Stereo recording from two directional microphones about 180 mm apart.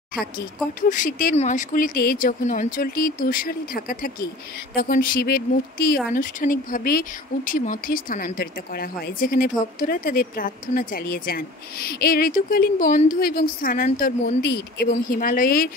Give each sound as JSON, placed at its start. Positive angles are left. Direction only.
{"t": 0.7, "sound": "speech", "side_deg": 45}